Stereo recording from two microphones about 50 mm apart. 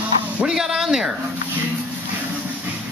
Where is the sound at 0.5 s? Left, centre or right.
Centre.